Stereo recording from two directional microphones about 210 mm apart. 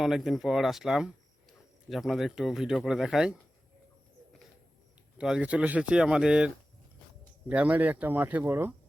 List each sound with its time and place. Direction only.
0.0 s speech: centre (ahead or behind)
5.1 s speech: 5° right (ahead or behind)